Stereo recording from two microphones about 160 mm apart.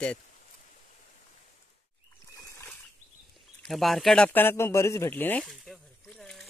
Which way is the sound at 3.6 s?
Centre (ahead or behind).